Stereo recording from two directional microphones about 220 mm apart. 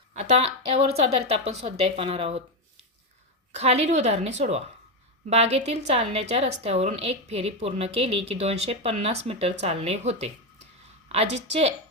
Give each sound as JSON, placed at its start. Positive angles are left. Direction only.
{"t": 0.1, "sound": "a woman's voice", "side_deg": -30}
{"t": 3.5, "sound": "a woman's voice", "side_deg": -30}